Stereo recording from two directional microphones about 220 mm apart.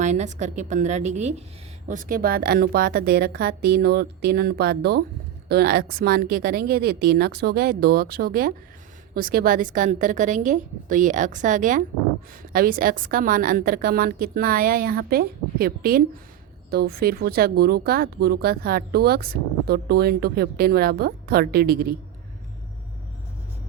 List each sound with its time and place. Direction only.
0.0 s a woman's voice: 30° right (ahead or behind)